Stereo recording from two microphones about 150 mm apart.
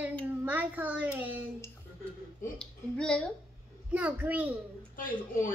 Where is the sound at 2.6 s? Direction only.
5° left (ahead or behind).